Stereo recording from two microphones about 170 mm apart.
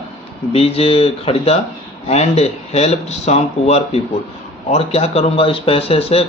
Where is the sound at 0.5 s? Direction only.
35° left (ahead or behind).